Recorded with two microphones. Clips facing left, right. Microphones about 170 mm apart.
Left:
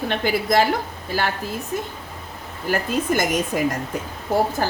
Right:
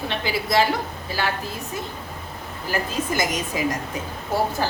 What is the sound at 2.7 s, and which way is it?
A woman's voice, 55° left (ahead or behind).